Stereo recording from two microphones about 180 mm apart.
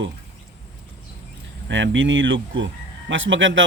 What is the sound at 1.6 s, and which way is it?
A man's voice, 90° right.